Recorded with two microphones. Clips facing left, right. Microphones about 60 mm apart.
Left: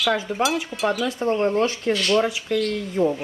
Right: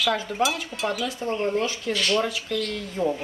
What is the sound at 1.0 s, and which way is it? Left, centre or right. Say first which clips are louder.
Speech: left 5 dB; left.